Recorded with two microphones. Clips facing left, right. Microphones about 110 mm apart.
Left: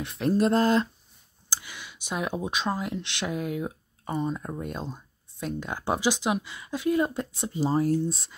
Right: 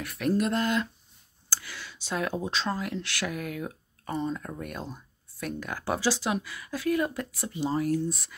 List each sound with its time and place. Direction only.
0.0 s speech: 25° left (ahead or behind)
1.5 s speech: 20° left (ahead or behind)